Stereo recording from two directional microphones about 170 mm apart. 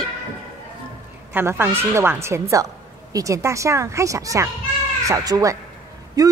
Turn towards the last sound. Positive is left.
turn(degrees=-20)  # may be behind; listen again after turning